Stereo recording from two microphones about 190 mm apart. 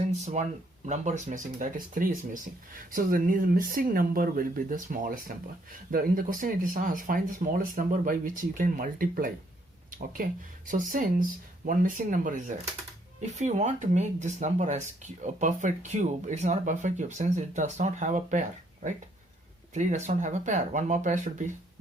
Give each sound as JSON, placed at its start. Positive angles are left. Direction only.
{"t": 0.4, "sound": "speech", "side_deg": -35}